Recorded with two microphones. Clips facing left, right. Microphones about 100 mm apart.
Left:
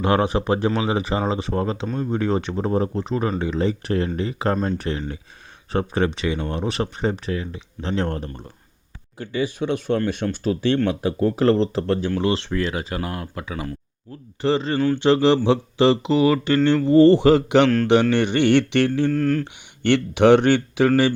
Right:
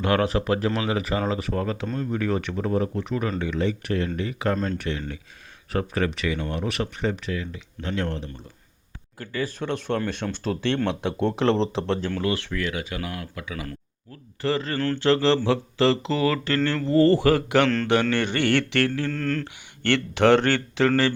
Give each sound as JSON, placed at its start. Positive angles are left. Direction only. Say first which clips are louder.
{"t": 0.0, "sound": "speech", "louder": "left 3 dB", "side_deg": 25}
{"t": 4.5, "sound": "mantra", "louder": "left 3 dB", "side_deg": 15}
{"t": 4.8, "sound": "speech", "louder": "left 3 dB", "side_deg": 35}
{"t": 9.1, "sound": "mantra", "louder": "left 5 dB", "side_deg": 20}
{"t": 10.8, "sound": "speech", "louder": "left 4 dB", "side_deg": 5}
{"t": 12.2, "sound": "speech", "louder": "left 4 dB", "side_deg": 25}
{"t": 14.4, "sound": "speech", "louder": "left 5 dB", "side_deg": 20}
{"t": 17.8, "sound": "mantra", "louder": "left 5 dB", "side_deg": 20}